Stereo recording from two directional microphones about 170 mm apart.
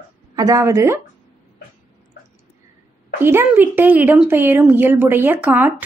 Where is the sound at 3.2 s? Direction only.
15° right (ahead or behind).